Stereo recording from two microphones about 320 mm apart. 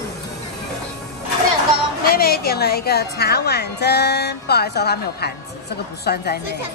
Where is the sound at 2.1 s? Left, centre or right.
Left.